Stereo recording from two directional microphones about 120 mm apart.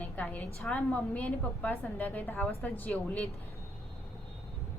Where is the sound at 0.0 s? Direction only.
15° left (ahead or behind).